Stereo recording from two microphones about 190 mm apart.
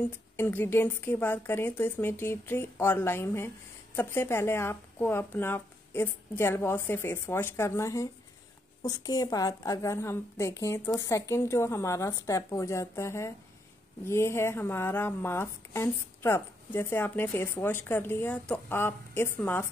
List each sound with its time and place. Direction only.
0.4 s a woman's voice: 10° left (ahead or behind)